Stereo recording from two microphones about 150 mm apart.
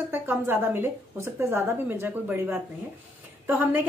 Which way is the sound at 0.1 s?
15° right (ahead or behind).